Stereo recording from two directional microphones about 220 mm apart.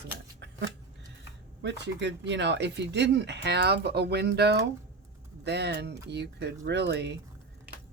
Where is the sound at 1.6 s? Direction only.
50° right (ahead or behind).